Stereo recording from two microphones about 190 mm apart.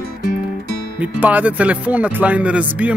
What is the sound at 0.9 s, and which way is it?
Speech, 10° right (ahead or behind).